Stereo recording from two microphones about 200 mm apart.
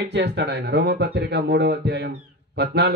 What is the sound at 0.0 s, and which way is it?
Speech, 60° right (ahead or behind).